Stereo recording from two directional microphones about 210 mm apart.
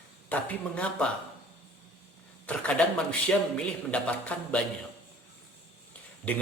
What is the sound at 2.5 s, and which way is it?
Speech, 5° left (ahead or behind).